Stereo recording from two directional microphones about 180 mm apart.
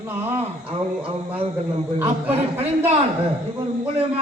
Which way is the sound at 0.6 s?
30° right (ahead or behind).